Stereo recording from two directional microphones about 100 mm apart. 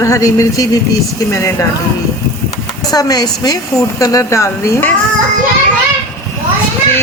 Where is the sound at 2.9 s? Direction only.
40° left (ahead or behind).